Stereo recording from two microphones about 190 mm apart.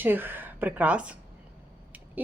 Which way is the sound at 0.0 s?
10° right (ahead or behind).